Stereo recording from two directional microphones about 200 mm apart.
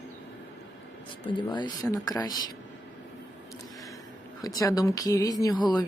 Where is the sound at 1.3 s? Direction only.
25° left (ahead or behind).